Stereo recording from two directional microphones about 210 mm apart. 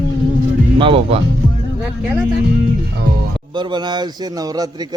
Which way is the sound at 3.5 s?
20° right (ahead or behind).